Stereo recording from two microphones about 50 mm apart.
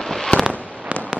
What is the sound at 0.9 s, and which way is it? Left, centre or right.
Fireworks, right.